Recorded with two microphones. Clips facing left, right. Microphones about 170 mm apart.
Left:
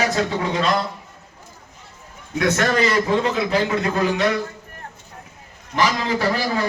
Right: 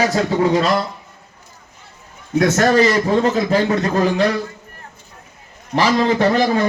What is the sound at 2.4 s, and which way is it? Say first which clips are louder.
A man's voice: right 5 dB; 35° right (ahead or behind).